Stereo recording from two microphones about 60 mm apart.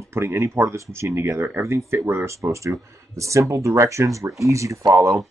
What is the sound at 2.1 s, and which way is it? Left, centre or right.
Speech, right.